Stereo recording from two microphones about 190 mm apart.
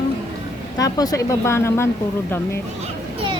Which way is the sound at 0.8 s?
20° left (ahead or behind).